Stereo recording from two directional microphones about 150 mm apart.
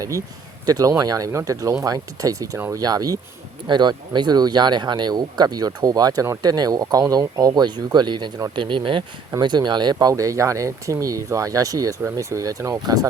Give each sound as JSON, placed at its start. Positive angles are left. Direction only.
{"t": 0.0, "sound": "speech", "side_deg": -20}